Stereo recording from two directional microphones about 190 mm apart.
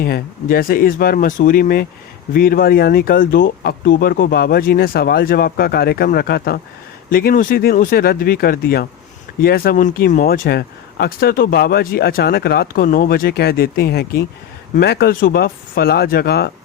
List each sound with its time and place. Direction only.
0.0 s speech: 50° left (ahead or behind)